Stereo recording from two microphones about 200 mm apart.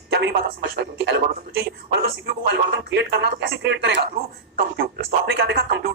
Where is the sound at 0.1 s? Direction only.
55° right (ahead or behind).